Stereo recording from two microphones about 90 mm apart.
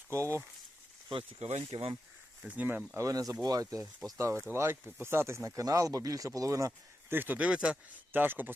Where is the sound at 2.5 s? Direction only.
20° right (ahead or behind).